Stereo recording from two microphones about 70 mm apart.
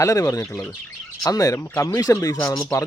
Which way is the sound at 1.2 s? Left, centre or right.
Left.